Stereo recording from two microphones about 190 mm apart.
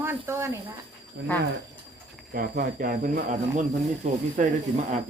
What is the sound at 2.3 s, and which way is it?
Speech, 50° right (ahead or behind).